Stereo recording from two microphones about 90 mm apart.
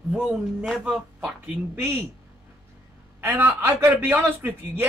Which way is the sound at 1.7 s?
30° right (ahead or behind).